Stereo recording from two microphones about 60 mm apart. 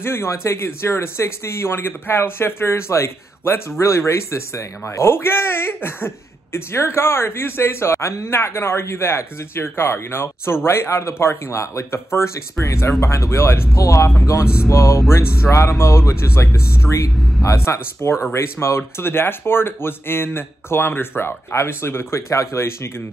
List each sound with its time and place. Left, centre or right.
0.0 s speech: left
13.0 s speech: left